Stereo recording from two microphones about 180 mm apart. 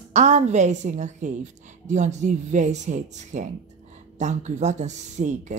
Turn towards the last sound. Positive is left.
turn(degrees=-40)  # may be behind; listen again after turning